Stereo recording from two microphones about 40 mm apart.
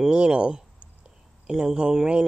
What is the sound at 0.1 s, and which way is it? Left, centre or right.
Speech, right.